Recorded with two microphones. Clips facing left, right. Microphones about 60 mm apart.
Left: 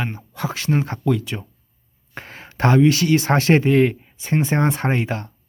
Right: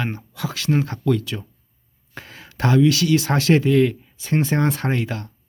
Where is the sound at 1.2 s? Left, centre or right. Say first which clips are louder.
Left 1 dB; left.